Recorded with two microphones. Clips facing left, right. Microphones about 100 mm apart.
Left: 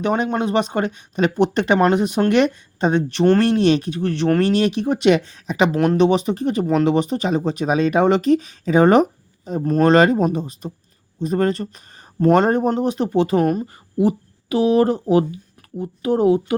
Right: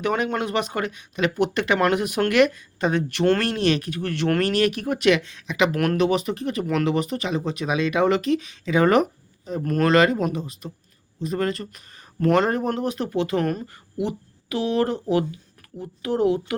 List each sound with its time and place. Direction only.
0.0 s speech: 20° left (ahead or behind)